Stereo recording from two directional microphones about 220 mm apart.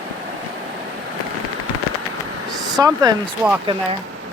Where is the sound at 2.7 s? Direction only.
15° right (ahead or behind).